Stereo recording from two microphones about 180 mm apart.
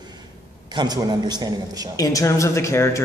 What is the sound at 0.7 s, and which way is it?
A man's voice, 20° right (ahead or behind).